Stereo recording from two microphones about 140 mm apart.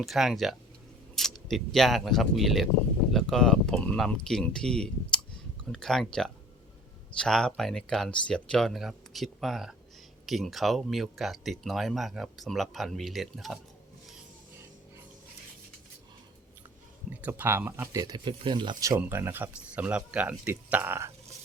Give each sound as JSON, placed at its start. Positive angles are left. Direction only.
{"t": 0.0, "sound": "speech", "side_deg": 0}
{"t": 17.1, "sound": "speech", "side_deg": -10}
{"t": 17.9, "sound": "speech", "side_deg": -30}